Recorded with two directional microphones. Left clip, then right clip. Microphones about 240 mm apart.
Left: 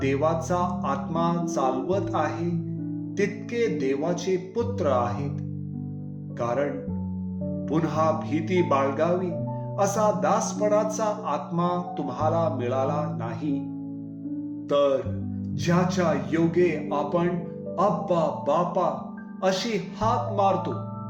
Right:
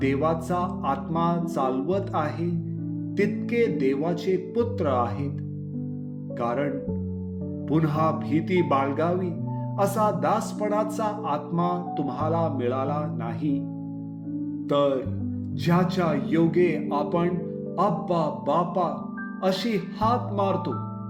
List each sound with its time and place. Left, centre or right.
0.0 s speech: right
6.4 s speech: right
7.7 s speech: right
14.7 s speech: right